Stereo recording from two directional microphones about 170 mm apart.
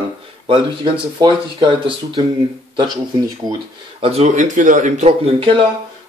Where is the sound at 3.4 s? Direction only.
25° right (ahead or behind).